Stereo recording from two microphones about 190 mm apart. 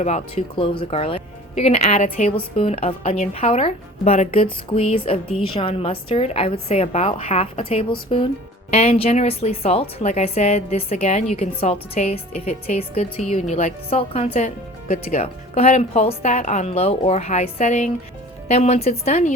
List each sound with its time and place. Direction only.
0.0 s a woman's voice: 35° left (ahead or behind)